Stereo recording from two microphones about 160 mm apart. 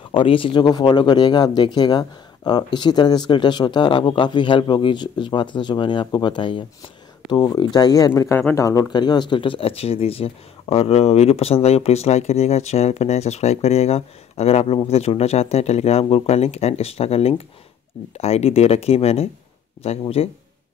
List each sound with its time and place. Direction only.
0.1 s speech: 35° left (ahead or behind); by 8.6 s 10° left (ahead or behind)
8.6 s speech: 25° left (ahead or behind); by 20.2 s 40° left (ahead or behind)